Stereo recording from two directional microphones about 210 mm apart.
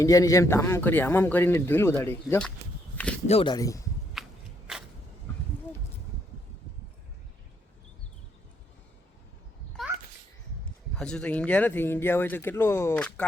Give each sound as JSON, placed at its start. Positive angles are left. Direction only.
{"t": 0.0, "sound": "speech", "side_deg": 15}
{"t": 3.2, "sound": "speech", "side_deg": 25}
{"t": 4.1, "sound": "walk", "side_deg": 0}
{"t": 10.9, "sound": "speech", "side_deg": 5}